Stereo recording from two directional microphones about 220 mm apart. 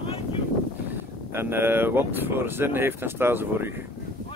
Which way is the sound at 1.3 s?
10° right (ahead or behind).